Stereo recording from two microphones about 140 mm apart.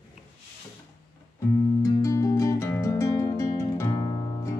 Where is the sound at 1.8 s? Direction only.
20° left (ahead or behind).